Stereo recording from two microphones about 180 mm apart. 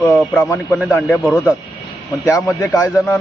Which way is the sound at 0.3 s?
10° left (ahead or behind).